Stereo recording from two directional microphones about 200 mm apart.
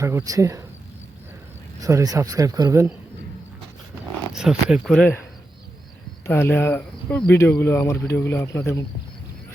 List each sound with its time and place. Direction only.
0.0 s speech: 15° right (ahead or behind)
1.8 s speech: 15° right (ahead or behind)
4.3 s speech: 5° right (ahead or behind)
6.2 s speech: 10° left (ahead or behind)